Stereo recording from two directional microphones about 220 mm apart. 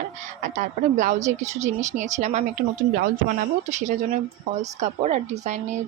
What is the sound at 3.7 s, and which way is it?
A woman's voice, 35° right (ahead or behind).